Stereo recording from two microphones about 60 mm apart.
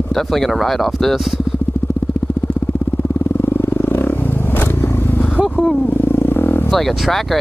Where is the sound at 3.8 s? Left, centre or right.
Left.